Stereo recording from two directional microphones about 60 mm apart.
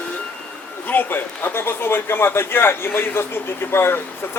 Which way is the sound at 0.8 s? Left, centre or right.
Left.